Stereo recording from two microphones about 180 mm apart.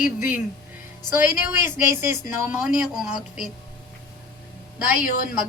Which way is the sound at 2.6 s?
Centre (ahead or behind).